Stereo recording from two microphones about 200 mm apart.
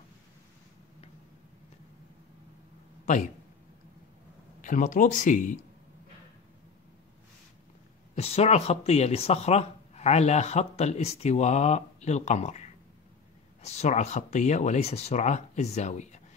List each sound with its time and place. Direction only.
4.6 s speech: 40° left (ahead or behind)
8.2 s speech: 30° left (ahead or behind)